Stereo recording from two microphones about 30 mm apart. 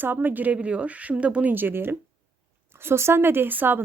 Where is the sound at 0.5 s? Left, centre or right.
Right.